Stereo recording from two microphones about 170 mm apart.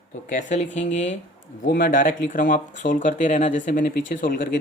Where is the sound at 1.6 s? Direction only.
60° left (ahead or behind).